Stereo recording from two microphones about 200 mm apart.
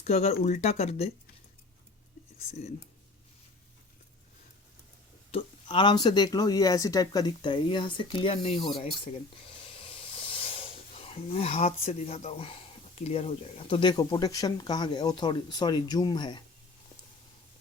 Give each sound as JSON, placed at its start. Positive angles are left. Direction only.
{"t": 0.0, "sound": "speech", "side_deg": 35}
{"t": 5.6, "sound": "speech", "side_deg": 20}